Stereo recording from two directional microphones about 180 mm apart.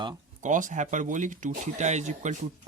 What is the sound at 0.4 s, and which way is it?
Speech, 45° right (ahead or behind).